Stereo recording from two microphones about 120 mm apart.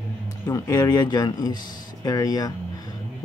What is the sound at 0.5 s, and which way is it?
Speech, 30° left (ahead or behind).